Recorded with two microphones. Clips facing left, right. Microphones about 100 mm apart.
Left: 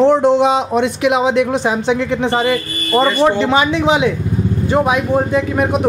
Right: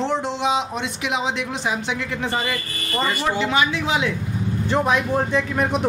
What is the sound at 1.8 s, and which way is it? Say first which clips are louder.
Speech: left 10 dB; 30° left (ahead or behind).